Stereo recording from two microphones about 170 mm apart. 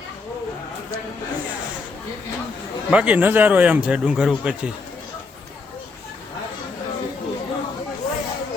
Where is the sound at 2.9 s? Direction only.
10° right (ahead or behind).